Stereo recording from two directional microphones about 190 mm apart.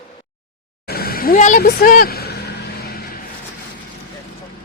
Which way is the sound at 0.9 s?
50° left (ahead or behind).